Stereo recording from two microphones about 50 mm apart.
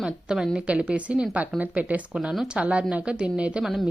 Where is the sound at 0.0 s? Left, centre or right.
Centre.